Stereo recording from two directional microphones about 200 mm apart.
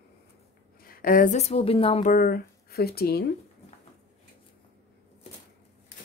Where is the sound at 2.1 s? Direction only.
45° left (ahead or behind).